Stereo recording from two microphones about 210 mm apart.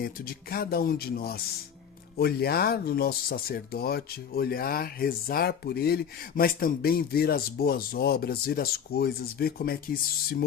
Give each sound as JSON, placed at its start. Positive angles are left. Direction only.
{"t": 0.0, "sound": "speech", "side_deg": 45}